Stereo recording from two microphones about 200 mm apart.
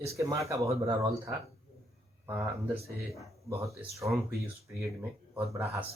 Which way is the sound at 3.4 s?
15° right (ahead or behind).